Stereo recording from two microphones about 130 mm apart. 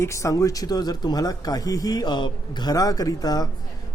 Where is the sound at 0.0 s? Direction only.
25° left (ahead or behind).